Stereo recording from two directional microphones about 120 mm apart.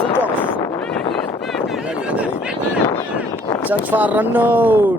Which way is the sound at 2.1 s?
10° right (ahead or behind).